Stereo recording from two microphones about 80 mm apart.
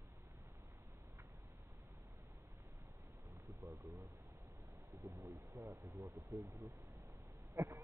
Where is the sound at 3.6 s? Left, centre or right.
Right.